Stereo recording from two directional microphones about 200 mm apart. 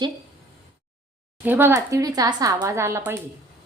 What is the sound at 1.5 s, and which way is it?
Speech, 10° right (ahead or behind).